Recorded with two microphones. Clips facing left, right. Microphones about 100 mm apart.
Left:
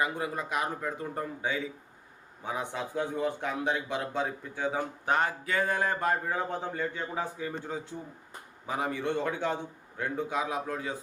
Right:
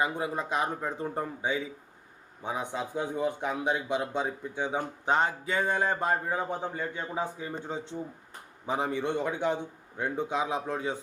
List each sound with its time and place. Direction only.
0.0 s speech: 25° right (ahead or behind)